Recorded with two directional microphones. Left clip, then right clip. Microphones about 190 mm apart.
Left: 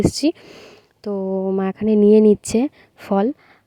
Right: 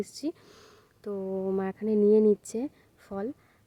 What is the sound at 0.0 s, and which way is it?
Speech, 45° left (ahead or behind).